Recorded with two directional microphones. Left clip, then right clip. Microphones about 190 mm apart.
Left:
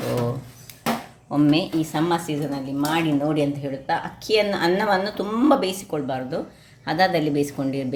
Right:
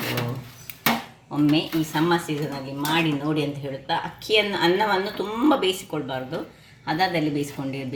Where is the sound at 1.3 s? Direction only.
60° left (ahead or behind).